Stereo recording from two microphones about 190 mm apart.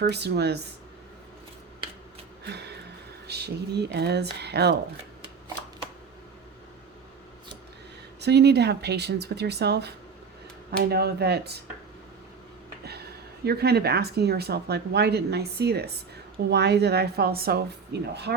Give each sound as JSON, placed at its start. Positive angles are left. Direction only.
{"t": 0.0, "sound": "speech", "side_deg": -60}
{"t": 2.4, "sound": "a sound", "side_deg": -60}
{"t": 3.2, "sound": "speech", "side_deg": -60}
{"t": 8.2, "sound": "speech", "side_deg": -60}
{"t": 13.4, "sound": "speech", "side_deg": -55}